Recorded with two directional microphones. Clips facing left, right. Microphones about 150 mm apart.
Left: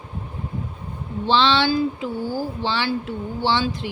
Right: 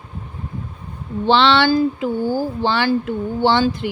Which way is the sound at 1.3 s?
60° right (ahead or behind).